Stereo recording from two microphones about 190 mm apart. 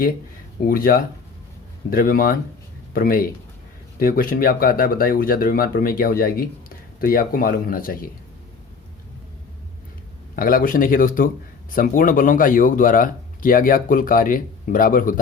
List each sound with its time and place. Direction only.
0.6 s speech: 50° left (ahead or behind)
10.3 s speech: 50° left (ahead or behind)